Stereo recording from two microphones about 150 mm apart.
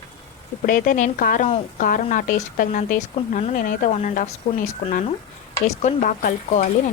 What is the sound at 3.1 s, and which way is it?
Speech, 50° left (ahead or behind).